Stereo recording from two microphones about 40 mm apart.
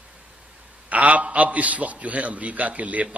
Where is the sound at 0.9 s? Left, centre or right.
Right.